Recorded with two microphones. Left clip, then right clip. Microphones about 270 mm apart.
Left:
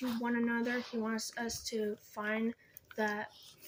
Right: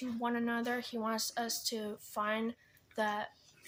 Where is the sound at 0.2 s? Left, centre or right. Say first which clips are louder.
Right 1 dB; right.